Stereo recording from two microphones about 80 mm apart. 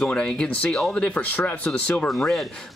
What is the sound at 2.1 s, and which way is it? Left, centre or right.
Speech, centre.